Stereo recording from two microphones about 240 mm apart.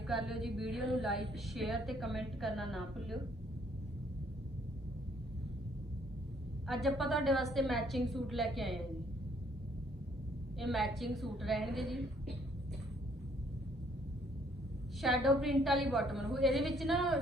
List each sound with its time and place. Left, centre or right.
0.1 s a woman's voice: centre
6.7 s a woman's voice: centre
10.6 s a woman's voice: centre
15.0 s a woman's voice: centre